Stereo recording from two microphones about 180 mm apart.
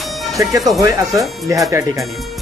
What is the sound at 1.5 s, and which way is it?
Speech, 15° right (ahead or behind).